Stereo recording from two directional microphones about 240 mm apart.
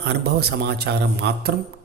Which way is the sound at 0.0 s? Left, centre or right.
Right.